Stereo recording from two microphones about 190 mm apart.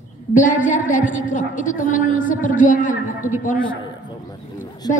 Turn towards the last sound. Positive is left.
turn(degrees=20)  # may be behind; listen again after turning